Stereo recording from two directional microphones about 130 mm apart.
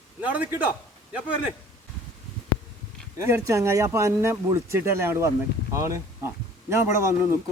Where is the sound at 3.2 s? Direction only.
20° right (ahead or behind).